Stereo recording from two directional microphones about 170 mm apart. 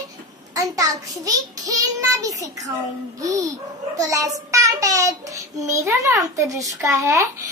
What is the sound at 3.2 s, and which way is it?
A child's voice, 20° right (ahead or behind).